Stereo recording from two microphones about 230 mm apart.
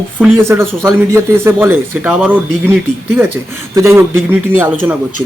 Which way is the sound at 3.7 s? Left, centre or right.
Centre.